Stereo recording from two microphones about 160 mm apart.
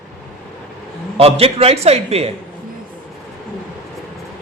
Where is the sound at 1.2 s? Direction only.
35° right (ahead or behind).